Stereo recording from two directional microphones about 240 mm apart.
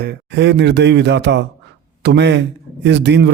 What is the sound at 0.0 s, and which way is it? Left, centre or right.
Speech, right.